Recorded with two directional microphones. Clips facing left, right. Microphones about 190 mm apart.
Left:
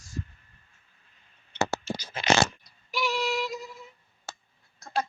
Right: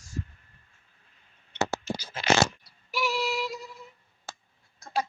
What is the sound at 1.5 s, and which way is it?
Scratch, 25° left (ahead or behind).